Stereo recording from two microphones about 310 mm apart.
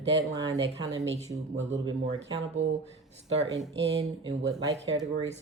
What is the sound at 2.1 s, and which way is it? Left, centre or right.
Speech, right.